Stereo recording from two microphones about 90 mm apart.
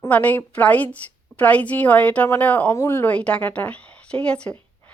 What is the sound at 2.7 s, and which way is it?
Speech, 30° left (ahead or behind).